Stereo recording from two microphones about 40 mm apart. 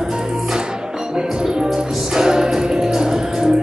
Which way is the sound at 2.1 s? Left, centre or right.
Centre.